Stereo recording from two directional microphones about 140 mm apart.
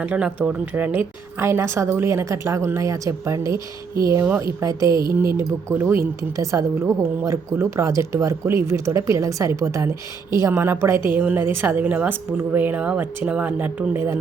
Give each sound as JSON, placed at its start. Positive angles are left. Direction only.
{"t": 0.0, "sound": "a woman's voice", "side_deg": -10}